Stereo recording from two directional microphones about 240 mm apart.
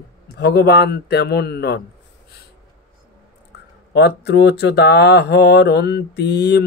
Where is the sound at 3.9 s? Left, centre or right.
Left.